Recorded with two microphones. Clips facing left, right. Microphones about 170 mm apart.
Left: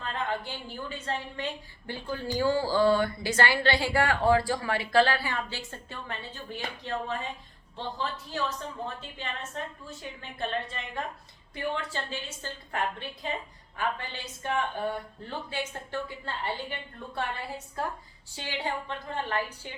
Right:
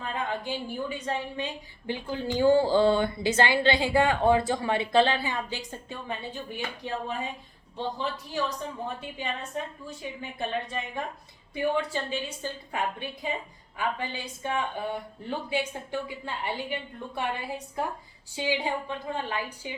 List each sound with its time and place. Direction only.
0.0 s a woman's voice: 15° right (ahead or behind)
18.3 s speech: 15° right (ahead or behind)